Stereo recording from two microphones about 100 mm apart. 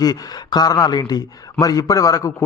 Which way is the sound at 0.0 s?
40° left (ahead or behind).